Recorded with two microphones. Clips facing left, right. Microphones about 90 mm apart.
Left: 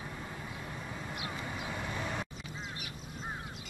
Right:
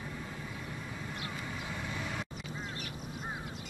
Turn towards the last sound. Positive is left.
turn(degrees=20)  # may be behind; listen again after turning